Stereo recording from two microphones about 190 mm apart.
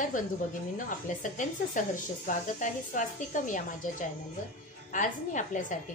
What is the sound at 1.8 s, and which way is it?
A woman's voice, 45° left (ahead or behind).